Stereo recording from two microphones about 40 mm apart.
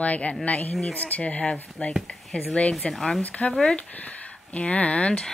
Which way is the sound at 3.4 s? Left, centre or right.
Left.